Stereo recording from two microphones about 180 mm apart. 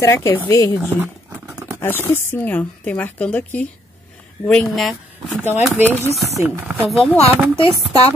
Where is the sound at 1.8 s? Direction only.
10° left (ahead or behind).